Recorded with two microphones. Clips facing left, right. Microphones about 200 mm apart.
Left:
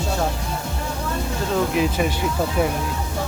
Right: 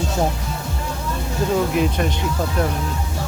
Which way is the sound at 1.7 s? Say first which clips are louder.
Right 1 dB; 5° left (ahead or behind).